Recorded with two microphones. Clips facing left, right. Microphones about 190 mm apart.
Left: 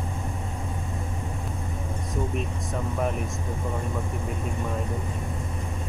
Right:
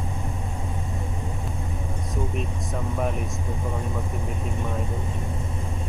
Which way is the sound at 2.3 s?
Centre (ahead or behind).